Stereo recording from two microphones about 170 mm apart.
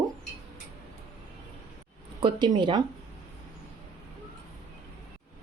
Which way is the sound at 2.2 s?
25° right (ahead or behind).